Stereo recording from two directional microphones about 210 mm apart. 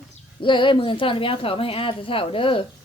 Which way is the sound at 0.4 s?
25° left (ahead or behind).